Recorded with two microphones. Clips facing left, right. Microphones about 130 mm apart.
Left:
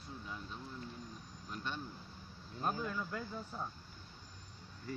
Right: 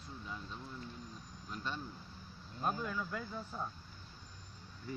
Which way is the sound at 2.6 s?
Centre (ahead or behind).